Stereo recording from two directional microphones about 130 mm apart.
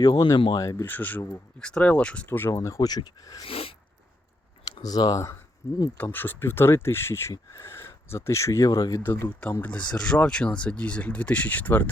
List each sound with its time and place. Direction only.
0.0 s speech: 30° left (ahead or behind)
0.9 s speech: 15° left (ahead or behind)
1.5 s speech: 5° left (ahead or behind); by 3.4 s 30° left (ahead or behind)
3.4 s a sound: 45° left (ahead or behind)
4.8 s speech: 30° left (ahead or behind); by 11.9 s 10° left (ahead or behind)